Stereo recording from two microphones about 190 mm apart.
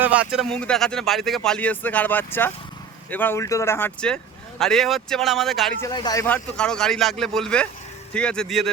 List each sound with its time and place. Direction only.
0.0 s speech: 5° right (ahead or behind)
5.8 s speech: 20° left (ahead or behind)
6.2 s speech: 5° left (ahead or behind)